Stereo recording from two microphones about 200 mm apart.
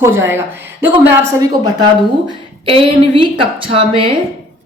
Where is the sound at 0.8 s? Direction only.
10° right (ahead or behind).